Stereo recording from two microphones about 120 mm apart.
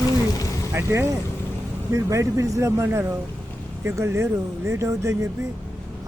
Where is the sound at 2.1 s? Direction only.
25° right (ahead or behind).